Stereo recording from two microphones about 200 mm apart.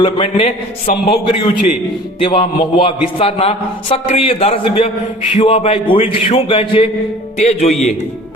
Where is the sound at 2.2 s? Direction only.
25° left (ahead or behind).